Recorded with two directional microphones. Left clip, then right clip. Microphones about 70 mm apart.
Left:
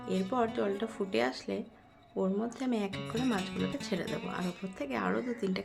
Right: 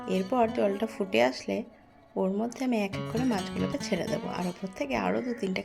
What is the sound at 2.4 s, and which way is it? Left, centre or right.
Speech, right.